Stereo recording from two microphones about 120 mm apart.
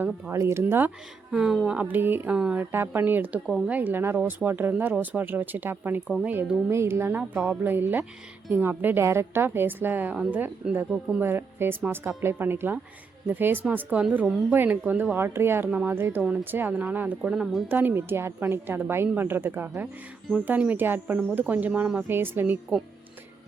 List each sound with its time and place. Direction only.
0.0 s a woman's voice: 25° right (ahead or behind)
1.3 s a woman's voice: 5° right (ahead or behind)
17.3 s speech: centre (ahead or behind)
17.7 s a woman's voice: 15° right (ahead or behind)